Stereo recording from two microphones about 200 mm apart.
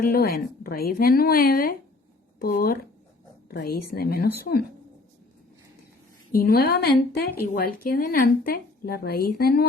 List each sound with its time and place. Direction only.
0.1 s a woman's voice: 50° left (ahead or behind)
6.3 s a woman's voice: 50° left (ahead or behind)